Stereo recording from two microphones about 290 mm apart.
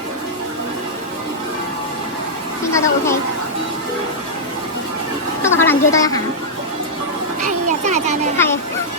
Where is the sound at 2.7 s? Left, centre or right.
Centre.